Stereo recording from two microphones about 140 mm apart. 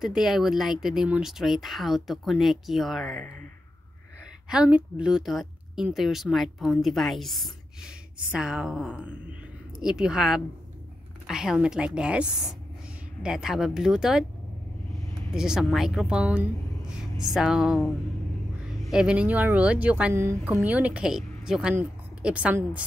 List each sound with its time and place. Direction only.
0.0 s speech: 5° right (ahead or behind)
4.5 s a woman's voice: 10° right (ahead or behind)
15.3 s a woman's voice: 5° right (ahead or behind)